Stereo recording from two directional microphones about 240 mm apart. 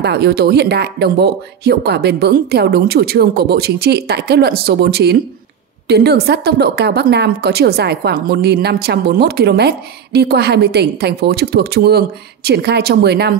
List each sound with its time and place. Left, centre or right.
0.0 s a woman's voice: right